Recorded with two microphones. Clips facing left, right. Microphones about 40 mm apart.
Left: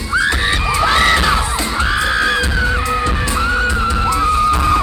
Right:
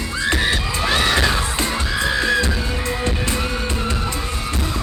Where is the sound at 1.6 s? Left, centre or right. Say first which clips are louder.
Left 5 dB; left.